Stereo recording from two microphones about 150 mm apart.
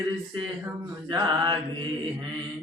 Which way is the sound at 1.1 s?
30° right (ahead or behind).